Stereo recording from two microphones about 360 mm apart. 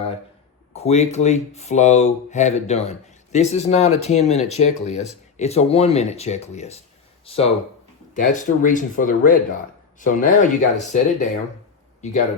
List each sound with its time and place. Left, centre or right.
0.7 s speech: centre